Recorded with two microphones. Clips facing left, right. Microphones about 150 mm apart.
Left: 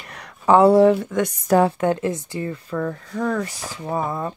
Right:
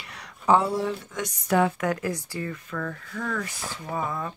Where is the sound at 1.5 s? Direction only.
35° left (ahead or behind).